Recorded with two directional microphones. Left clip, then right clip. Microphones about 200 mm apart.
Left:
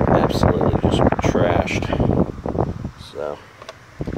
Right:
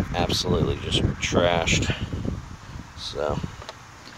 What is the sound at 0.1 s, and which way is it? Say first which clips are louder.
Speech: left 5 dB; 5° left (ahead or behind).